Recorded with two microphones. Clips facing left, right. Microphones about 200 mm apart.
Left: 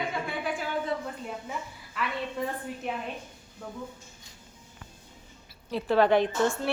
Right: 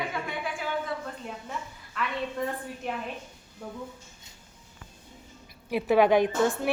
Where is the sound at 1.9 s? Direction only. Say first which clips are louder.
Right 1 dB; 5° left (ahead or behind).